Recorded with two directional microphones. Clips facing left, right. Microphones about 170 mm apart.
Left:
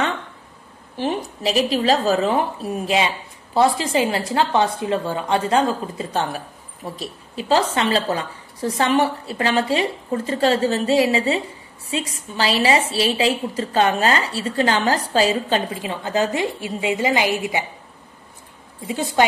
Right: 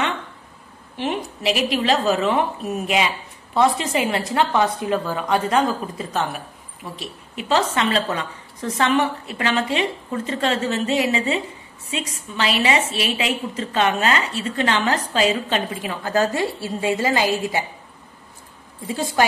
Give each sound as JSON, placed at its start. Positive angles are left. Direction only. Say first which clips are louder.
{"t": 0.9, "sound": "a woman's voice", "louder": "left 2 dB", "side_deg": 35}
{"t": 18.9, "sound": "a woman's voice", "louder": "left 2 dB", "side_deg": 20}